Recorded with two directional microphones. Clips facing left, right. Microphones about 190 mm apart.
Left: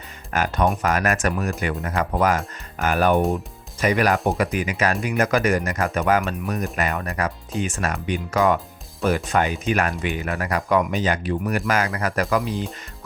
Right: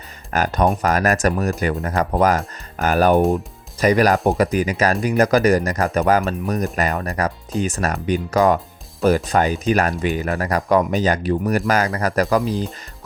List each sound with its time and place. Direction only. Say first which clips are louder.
0.3 s speech: right 3 dB; 40° right (ahead or behind)